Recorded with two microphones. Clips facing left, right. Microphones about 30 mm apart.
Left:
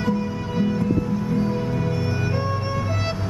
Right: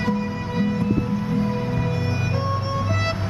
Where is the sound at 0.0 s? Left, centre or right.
Right.